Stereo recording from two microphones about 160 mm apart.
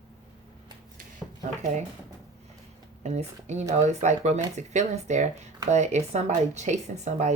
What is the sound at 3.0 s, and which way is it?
Speech, 45° right (ahead or behind).